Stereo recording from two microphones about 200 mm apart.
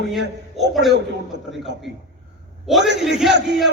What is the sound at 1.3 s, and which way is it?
Speech, 60° right (ahead or behind).